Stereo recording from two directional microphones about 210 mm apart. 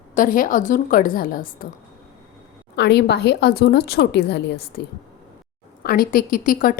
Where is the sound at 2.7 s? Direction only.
55° left (ahead or behind).